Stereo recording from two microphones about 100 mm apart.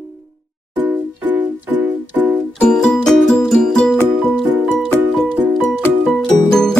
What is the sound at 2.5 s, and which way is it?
Music, 5° left (ahead or behind).